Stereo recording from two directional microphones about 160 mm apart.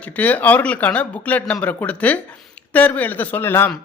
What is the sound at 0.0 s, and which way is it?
Speech, 10° left (ahead or behind).